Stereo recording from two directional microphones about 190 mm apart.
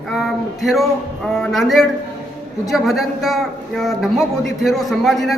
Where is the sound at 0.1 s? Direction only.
Centre (ahead or behind).